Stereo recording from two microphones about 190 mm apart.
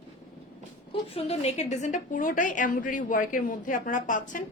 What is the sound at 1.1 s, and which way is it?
A woman's voice, 35° left (ahead or behind).